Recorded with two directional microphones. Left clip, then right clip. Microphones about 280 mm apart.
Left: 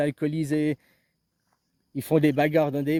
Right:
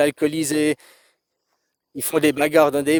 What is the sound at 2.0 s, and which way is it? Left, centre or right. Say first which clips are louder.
Speech: right 3 dB; right.